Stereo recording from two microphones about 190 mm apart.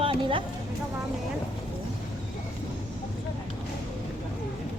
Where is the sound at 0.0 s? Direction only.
30° right (ahead or behind).